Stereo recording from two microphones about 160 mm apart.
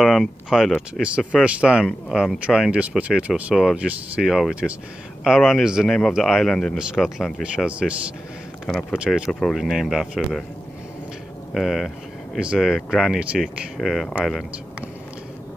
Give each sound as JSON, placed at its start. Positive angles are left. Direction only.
{"t": 0.0, "sound": "speech", "side_deg": 0}
{"t": 11.5, "sound": "speech", "side_deg": 0}